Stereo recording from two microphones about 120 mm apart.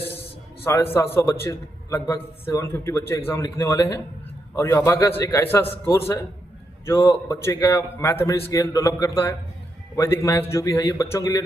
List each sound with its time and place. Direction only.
0.6 s a man's voice: 20° left (ahead or behind)
6.8 s a man's voice: 20° left (ahead or behind)